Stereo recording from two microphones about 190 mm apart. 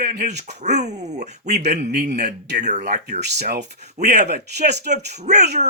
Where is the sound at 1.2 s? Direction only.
60° right (ahead or behind).